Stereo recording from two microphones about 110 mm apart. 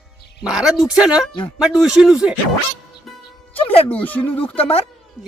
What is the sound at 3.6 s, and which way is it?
Speech, 55° left (ahead or behind).